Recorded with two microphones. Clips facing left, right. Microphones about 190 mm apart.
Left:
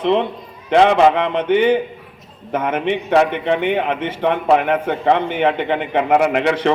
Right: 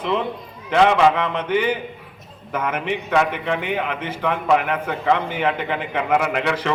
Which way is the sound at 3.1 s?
35° left (ahead or behind).